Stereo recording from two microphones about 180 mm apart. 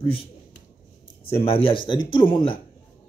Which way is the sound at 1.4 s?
30° left (ahead or behind).